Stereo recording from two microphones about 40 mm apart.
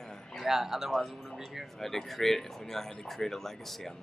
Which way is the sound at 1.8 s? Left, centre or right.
Centre.